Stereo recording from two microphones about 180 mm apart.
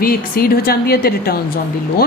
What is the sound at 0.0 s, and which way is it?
A woman's voice, 55° left (ahead or behind).